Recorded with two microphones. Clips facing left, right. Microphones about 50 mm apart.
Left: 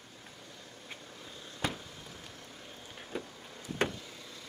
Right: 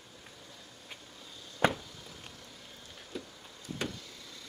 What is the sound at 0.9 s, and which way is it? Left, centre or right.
Vehicle, left.